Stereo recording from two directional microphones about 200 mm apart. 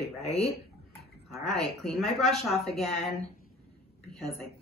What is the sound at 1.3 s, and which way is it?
Speech, centre (ahead or behind).